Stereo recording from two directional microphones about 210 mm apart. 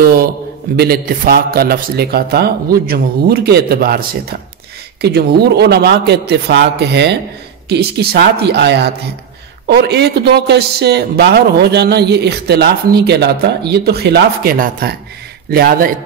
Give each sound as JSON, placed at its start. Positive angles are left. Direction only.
{"t": 0.0, "sound": "a man's voice", "side_deg": -45}